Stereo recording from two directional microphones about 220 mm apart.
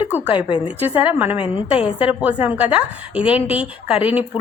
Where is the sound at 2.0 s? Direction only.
5° right (ahead or behind).